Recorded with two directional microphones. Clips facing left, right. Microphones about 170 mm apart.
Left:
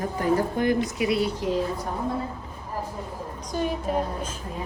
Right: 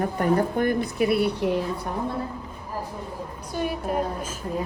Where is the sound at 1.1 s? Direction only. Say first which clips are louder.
Right 2 dB; 60° right (ahead or behind).